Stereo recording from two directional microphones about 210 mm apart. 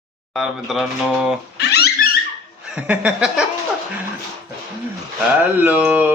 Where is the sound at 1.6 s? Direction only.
50° left (ahead or behind).